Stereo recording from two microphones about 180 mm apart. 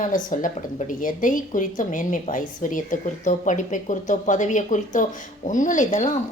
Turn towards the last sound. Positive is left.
turn(degrees=40)  # may be behind; listen again after turning